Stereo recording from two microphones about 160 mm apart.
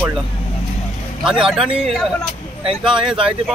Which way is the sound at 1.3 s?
Centre (ahead or behind).